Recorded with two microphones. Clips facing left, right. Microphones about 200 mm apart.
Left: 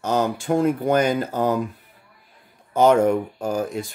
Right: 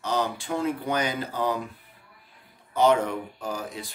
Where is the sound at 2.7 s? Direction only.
45° left (ahead or behind).